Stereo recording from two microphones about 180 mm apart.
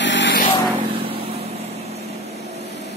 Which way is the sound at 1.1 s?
30° right (ahead or behind).